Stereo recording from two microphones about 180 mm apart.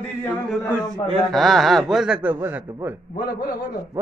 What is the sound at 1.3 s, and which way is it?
A man's voice, centre (ahead or behind).